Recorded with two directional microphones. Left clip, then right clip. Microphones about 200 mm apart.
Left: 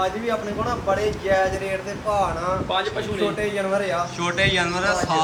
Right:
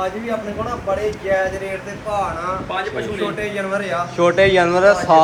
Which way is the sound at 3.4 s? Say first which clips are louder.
Right 1 dB; 50° left (ahead or behind).